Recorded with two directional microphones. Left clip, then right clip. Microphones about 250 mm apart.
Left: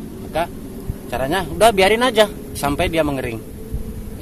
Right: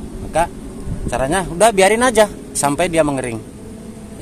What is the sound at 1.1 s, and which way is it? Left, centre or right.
Speech, right.